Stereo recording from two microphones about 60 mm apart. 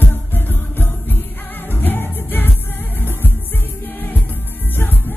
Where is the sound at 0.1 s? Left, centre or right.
Left.